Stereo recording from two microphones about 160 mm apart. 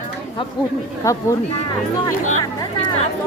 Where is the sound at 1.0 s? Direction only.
20° left (ahead or behind).